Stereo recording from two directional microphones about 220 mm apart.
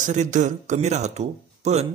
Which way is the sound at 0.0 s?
35° right (ahead or behind).